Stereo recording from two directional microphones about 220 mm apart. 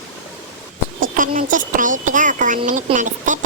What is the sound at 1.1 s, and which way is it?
Speech, 35° right (ahead or behind).